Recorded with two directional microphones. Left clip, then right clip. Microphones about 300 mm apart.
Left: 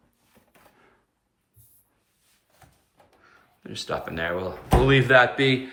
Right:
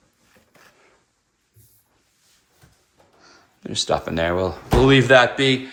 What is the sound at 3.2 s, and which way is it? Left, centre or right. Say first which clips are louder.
Speech: right 8 dB; centre.